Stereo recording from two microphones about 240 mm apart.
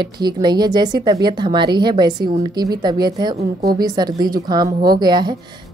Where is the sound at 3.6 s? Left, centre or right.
Centre.